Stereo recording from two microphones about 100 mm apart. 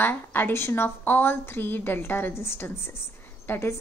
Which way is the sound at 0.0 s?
20° left (ahead or behind).